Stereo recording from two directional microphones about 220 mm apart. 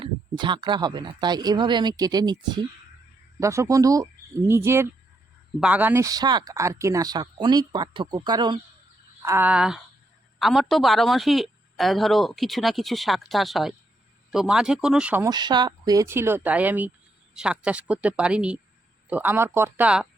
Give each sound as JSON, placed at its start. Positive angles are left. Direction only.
{"t": 0.0, "sound": "speech", "side_deg": -20}
{"t": 9.2, "sound": "speech", "side_deg": -10}